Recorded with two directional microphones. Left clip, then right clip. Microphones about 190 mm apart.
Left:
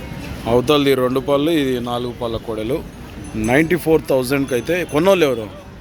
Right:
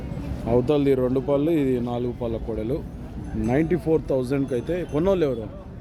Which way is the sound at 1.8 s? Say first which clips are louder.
Left 5 dB; 25° left (ahead or behind).